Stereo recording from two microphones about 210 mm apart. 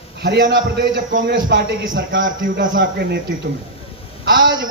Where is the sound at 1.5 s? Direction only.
60° right (ahead or behind).